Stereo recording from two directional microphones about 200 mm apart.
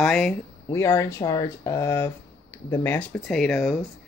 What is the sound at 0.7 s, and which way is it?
Speech, 15° left (ahead or behind).